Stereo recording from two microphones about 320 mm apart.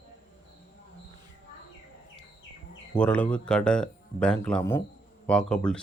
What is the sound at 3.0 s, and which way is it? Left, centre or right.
Speech, centre.